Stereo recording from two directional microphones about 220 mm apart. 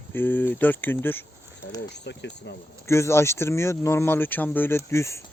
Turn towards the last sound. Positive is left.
turn(degrees=10)  # may be behind; listen again after turning